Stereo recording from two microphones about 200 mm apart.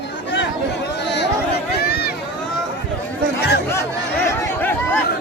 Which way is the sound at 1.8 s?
50° left (ahead or behind).